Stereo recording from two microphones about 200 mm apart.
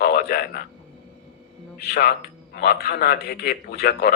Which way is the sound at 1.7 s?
55° left (ahead or behind).